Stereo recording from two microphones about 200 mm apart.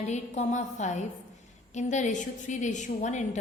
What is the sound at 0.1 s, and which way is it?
A woman's voice, 35° left (ahead or behind).